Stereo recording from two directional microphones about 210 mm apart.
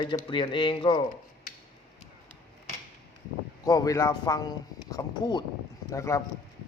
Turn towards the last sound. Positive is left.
turn(degrees=15)  # may be behind; listen again after turning